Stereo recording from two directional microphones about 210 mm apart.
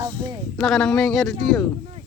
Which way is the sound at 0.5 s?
Centre (ahead or behind).